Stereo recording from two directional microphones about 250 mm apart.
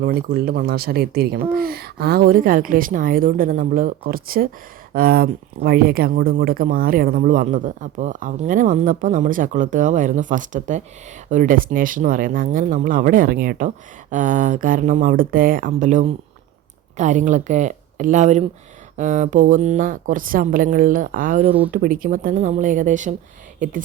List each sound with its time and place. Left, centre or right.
0.0 s speech: right